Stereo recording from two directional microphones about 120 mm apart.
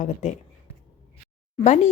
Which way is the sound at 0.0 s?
80° left.